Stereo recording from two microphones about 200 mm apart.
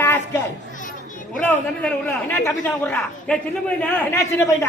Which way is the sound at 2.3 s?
10° left (ahead or behind).